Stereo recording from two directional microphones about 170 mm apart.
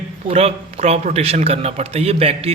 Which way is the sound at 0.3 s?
35° right (ahead or behind).